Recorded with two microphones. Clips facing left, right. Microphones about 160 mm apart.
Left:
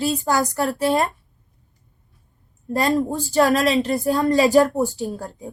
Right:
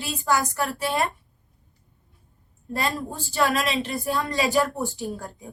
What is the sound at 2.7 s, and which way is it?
A woman's voice, 40° left (ahead or behind).